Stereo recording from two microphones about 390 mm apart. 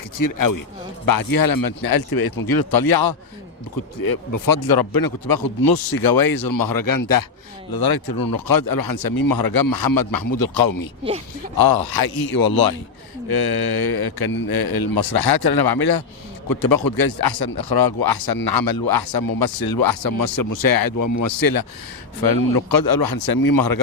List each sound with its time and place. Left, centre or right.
0.2 s a man's voice: left
7.7 s a man's voice: left